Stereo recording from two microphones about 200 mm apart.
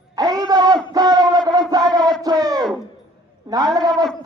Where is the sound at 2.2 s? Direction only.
20° right (ahead or behind).